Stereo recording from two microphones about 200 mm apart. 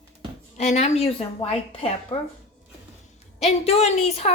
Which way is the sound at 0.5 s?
35° left (ahead or behind).